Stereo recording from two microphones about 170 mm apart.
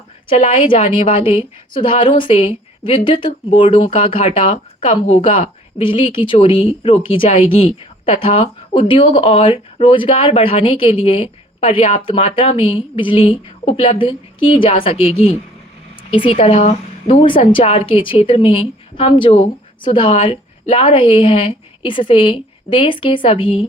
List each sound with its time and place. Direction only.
0.3 s speech: 30° left (ahead or behind)